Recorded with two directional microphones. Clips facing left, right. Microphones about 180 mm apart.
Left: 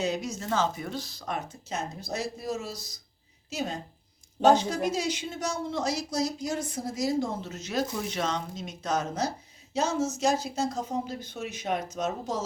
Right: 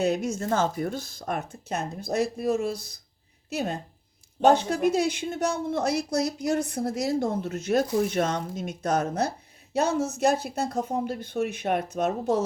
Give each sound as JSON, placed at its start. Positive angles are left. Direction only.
{"t": 0.0, "sound": "speech", "side_deg": -55}